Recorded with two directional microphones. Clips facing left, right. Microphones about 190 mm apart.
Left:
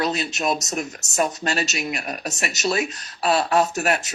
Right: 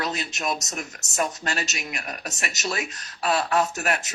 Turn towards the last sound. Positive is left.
turn(degrees=30)  # may be behind; listen again after turning